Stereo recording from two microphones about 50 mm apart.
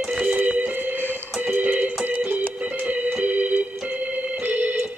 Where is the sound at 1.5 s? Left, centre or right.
Right.